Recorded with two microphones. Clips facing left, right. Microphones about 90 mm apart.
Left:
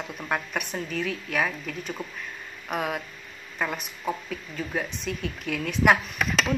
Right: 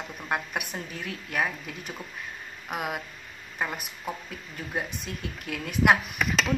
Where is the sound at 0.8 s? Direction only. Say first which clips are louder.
Left 7 dB; 85° left.